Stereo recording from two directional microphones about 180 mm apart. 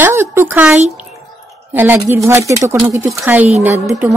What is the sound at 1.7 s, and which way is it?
A woman's voice, 10° right (ahead or behind).